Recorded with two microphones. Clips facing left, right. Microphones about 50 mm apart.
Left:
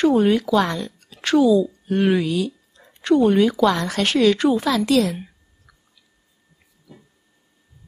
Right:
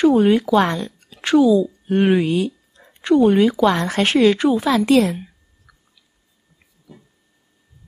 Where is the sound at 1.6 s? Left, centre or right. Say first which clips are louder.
Right 2 dB; right.